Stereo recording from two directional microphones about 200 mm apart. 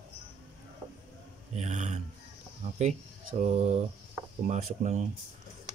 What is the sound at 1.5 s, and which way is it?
Speech, 35° right (ahead or behind).